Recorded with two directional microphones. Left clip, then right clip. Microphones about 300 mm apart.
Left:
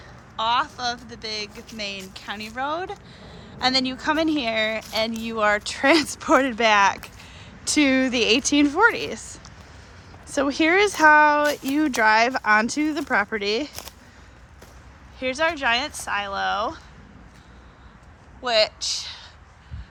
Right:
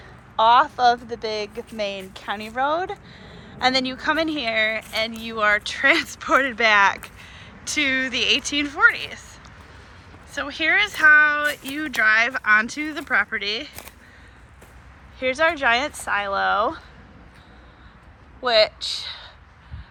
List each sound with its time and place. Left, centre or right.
0.3 s speech: centre
15.2 s speech: centre
18.4 s speech: centre